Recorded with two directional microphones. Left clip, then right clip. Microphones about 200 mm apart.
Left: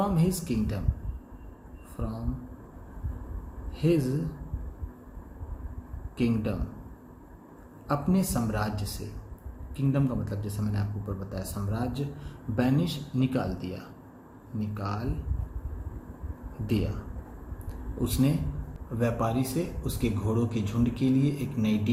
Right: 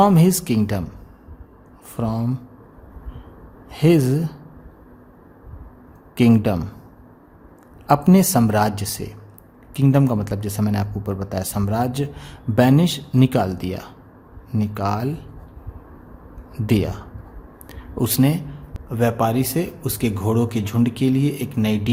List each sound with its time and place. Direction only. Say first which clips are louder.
0.0 s speech: right 13 dB; 55° right (ahead or behind)
2.0 s speech: right 13 dB; 55° right (ahead or behind)
3.7 s speech: right 10 dB; 50° right (ahead or behind)
6.1 s speech: right 12 dB; 50° right (ahead or behind)
7.9 s speech: right 13 dB; 55° right (ahead or behind)
16.6 s speech: right 10 dB; 55° right (ahead or behind)
17.7 s a sound: right 9 dB; 50° right (ahead or behind)
18.9 s speech: right 9 dB; 45° right (ahead or behind)